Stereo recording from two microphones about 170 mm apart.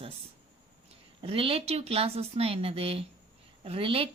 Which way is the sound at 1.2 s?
30° right (ahead or behind).